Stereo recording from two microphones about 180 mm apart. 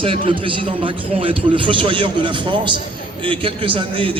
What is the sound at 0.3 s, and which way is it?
A man's voice, 30° right (ahead or behind).